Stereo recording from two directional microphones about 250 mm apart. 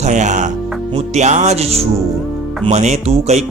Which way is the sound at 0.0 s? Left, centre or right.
Right.